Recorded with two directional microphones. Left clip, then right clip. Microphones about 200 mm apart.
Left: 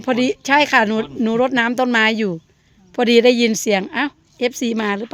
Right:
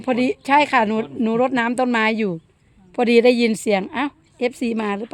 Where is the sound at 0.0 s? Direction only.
10° left (ahead or behind).